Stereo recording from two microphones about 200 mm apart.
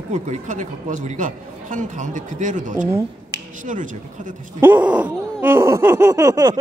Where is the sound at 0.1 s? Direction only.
35° right (ahead or behind).